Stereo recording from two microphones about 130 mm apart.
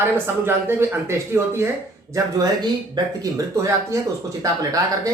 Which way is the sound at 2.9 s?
25° right (ahead or behind).